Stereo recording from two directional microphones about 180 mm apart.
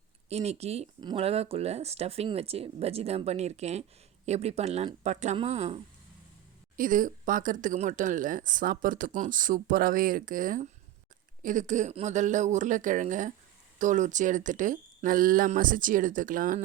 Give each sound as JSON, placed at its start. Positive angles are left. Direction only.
{"t": 0.3, "sound": "speech", "side_deg": -35}
{"t": 6.7, "sound": "speech", "side_deg": -50}